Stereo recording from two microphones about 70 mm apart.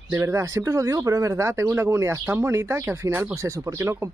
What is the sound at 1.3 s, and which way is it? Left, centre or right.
Speech, right.